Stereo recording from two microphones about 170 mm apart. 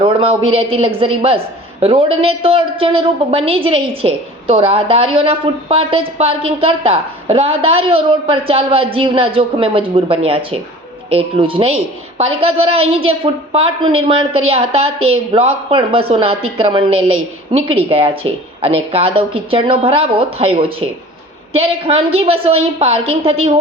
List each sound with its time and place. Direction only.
0.0 s a woman's voice: 30° right (ahead or behind)